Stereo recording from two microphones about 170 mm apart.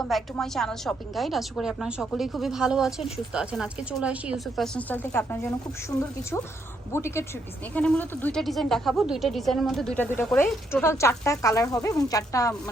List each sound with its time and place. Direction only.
0.0 s a woman's voice: centre (ahead or behind); by 12.5 s 20° left (ahead or behind)